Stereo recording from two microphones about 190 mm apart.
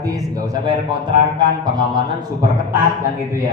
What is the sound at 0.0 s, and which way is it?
A man's voice, 20° right (ahead or behind).